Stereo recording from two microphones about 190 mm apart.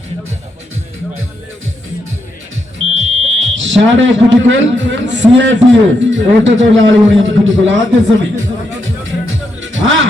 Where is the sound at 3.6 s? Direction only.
80° right.